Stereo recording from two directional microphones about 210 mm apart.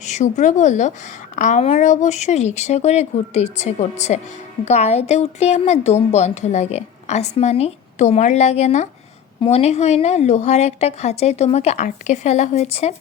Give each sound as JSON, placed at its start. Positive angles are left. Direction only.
{"t": 0.0, "sound": "a woman's voice", "side_deg": 35}